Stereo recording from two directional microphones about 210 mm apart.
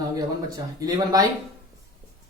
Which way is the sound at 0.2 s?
20° right (ahead or behind).